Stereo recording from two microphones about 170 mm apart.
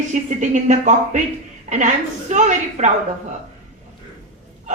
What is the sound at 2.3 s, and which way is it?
Speech, 45° right (ahead or behind).